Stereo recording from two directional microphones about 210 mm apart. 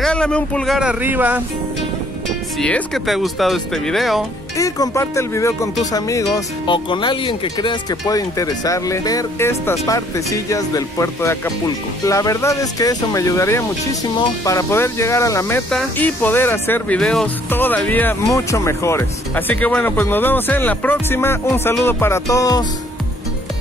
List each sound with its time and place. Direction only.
0.0 s speech: 5° left (ahead or behind)
2.2 s speech: 5° left (ahead or behind)
4.6 s speech: 15° left (ahead or behind)